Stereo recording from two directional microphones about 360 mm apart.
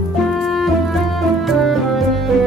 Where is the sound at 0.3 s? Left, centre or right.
Centre.